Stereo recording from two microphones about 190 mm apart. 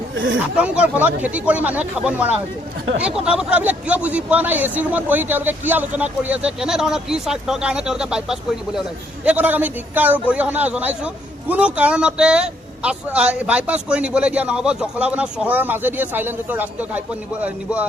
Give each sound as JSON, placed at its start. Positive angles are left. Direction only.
{"t": 0.2, "sound": "speech", "side_deg": -90}
{"t": 0.5, "sound": "a man's voice", "side_deg": -5}